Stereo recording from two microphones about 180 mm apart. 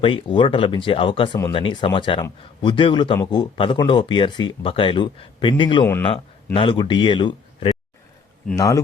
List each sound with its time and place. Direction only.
0.0 s speech: 30° left (ahead or behind)